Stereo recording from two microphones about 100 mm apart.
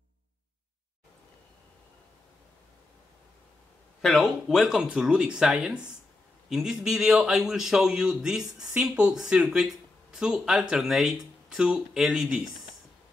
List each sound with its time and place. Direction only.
4.0 s a man's voice: centre (ahead or behind)